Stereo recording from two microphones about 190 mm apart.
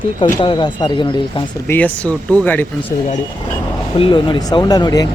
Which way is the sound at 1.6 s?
10° left (ahead or behind).